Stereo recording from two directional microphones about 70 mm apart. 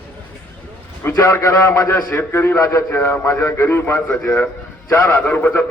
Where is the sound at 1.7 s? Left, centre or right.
Left.